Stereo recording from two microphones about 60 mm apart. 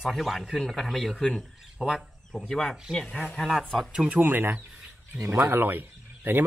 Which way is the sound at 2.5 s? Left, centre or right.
Centre.